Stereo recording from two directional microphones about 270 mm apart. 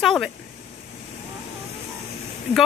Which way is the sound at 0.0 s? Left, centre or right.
Centre.